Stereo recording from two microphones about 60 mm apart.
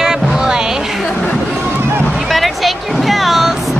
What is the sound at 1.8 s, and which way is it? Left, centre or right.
Run, right.